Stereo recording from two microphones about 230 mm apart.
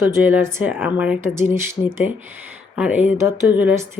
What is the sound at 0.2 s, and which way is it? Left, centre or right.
Speech, centre.